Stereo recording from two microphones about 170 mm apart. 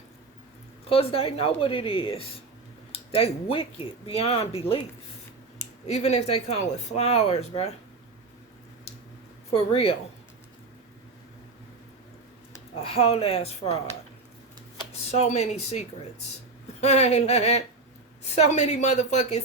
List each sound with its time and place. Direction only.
0.9 s speech: 35° left (ahead or behind)
9.5 s speech: 35° left (ahead or behind)
12.8 s speech: 35° left (ahead or behind)
15.2 s speech: 40° left (ahead or behind)